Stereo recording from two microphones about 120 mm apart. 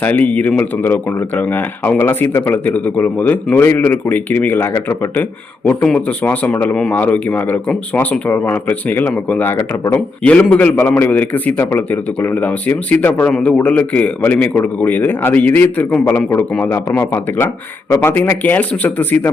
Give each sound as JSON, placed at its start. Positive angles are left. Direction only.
{"t": 0.0, "sound": "speech", "side_deg": 15}
{"t": 5.6, "sound": "speech", "side_deg": 10}